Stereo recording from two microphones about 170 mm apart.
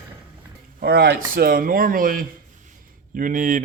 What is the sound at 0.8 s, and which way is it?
Speech, 70° right (ahead or behind).